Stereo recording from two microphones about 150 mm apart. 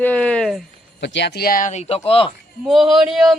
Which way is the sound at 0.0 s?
10° left (ahead or behind).